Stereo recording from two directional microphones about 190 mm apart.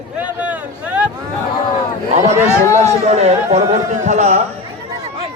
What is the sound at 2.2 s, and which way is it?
A man's voice, 35° right (ahead or behind).